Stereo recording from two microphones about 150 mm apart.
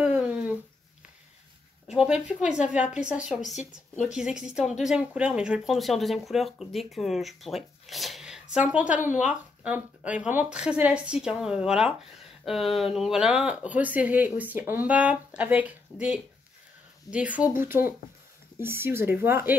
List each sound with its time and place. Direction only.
0.0 s a sound: 10° right (ahead or behind)
1.9 s speech: 5° right (ahead or behind)
17.1 s speech: 25° left (ahead or behind)
17.4 s speech: 15° right (ahead or behind)